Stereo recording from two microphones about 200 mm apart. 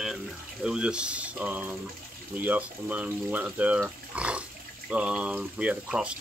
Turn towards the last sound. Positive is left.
turn(degrees=-5)  # may be behind; listen again after turning